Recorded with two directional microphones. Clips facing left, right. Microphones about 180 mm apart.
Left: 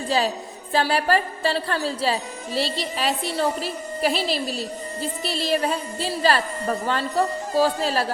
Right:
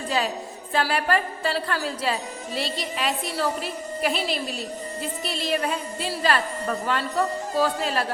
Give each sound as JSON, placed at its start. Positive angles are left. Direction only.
{"t": 0.7, "sound": "a woman's voice", "side_deg": 30}